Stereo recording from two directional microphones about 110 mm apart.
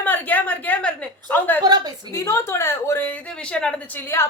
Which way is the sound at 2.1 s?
25° left (ahead or behind).